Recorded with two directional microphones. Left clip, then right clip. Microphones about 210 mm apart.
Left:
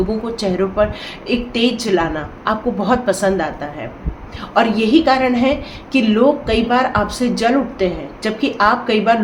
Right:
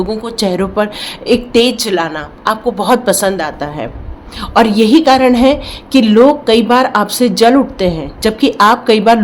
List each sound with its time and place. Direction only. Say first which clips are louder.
0.2 s a woman's voice: right 4 dB; 55° right (ahead or behind)